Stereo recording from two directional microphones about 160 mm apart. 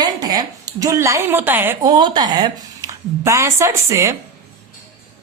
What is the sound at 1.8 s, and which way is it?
A woman's voice, 25° right (ahead or behind).